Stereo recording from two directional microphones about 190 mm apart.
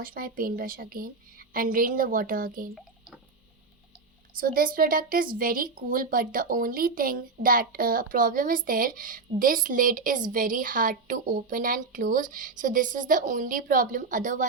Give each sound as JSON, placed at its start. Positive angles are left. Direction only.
{"t": 0.0, "sound": "a woman's voice", "side_deg": -50}
{"t": 4.4, "sound": "a woman's voice", "side_deg": -50}